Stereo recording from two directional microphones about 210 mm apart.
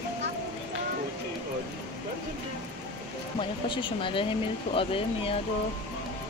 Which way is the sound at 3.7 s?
25° left (ahead or behind).